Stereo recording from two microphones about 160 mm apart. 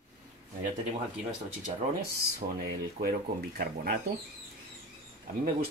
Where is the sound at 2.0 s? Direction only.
70° right (ahead or behind).